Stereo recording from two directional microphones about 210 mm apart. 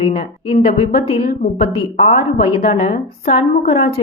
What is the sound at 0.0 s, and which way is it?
Speech, 25° left (ahead or behind).